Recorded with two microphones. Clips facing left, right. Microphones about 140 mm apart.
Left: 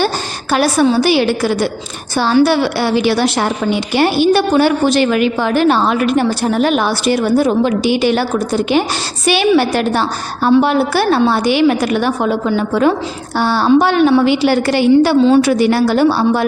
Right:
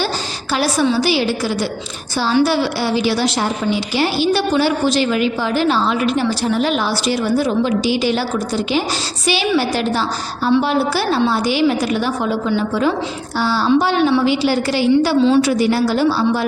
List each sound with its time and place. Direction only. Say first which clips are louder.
0.5 s a woman's voice: left 4 dB; 55° left (ahead or behind)